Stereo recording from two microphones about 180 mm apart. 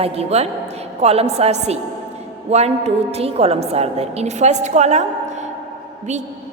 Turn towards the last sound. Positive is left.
turn(degrees=-40)  # may be behind; listen again after turning